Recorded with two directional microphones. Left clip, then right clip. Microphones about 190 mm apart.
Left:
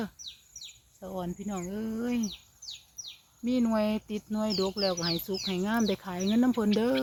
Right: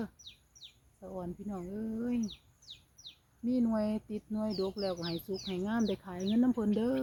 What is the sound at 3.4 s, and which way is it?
Speech, 25° left (ahead or behind).